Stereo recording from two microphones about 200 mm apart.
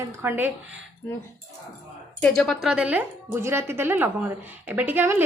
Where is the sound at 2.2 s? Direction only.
5° left (ahead or behind).